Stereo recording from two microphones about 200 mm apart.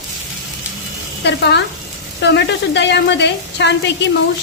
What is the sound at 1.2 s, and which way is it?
Speech, 60° left (ahead or behind).